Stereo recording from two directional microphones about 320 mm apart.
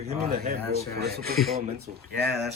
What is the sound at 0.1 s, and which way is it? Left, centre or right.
A man's voice, right.